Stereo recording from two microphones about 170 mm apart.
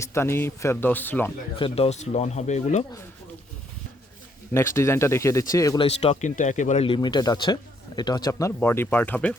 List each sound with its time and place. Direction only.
0.0 s speech: 15° left (ahead or behind)
1.5 s speech: 35° left (ahead or behind)
4.5 s speech: 15° left (ahead or behind)
5.8 s speech: 35° left (ahead or behind); by 9.3 s 10° left (ahead or behind)